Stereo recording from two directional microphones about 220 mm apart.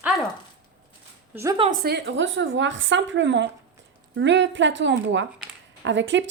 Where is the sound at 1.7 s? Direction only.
45° right (ahead or behind).